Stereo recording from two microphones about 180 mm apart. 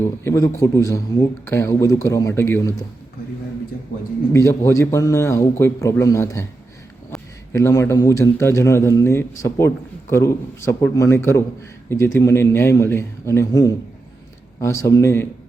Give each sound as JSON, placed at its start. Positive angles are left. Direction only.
{"t": 0.0, "sound": "a man's voice", "side_deg": 15}
{"t": 4.3, "sound": "a man's voice", "side_deg": 15}
{"t": 7.5, "sound": "a man's voice", "side_deg": 15}